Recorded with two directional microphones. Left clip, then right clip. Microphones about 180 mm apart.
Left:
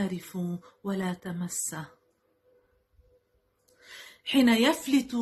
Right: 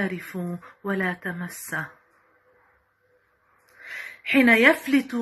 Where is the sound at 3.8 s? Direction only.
15° left (ahead or behind).